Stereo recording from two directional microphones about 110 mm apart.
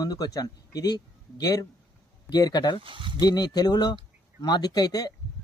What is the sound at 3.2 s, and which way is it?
Speech, 40° left (ahead or behind).